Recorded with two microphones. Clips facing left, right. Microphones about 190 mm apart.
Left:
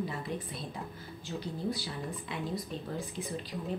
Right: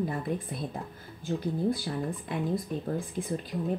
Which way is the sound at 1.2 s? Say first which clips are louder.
Right 7 dB; 50° right (ahead or behind).